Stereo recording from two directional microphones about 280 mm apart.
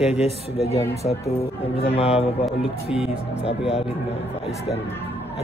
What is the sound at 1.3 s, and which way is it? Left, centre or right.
Speech, left.